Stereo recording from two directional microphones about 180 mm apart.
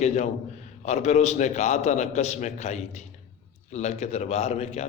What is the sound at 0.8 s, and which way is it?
A man's voice, 40° left (ahead or behind).